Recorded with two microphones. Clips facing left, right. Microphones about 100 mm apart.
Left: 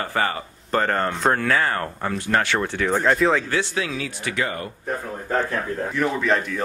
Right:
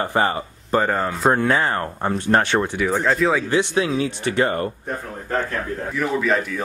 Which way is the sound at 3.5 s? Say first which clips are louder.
Right 5 dB; 20° right (ahead or behind).